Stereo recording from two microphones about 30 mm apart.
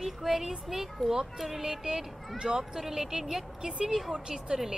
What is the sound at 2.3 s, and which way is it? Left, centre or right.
Speech, right.